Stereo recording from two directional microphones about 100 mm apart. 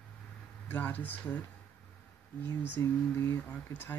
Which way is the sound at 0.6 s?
15° left (ahead or behind).